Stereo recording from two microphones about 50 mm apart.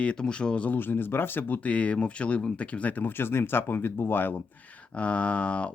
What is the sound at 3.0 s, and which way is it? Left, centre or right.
Speech, left.